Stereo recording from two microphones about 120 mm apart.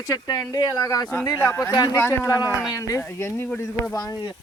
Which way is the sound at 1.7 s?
35° left (ahead or behind).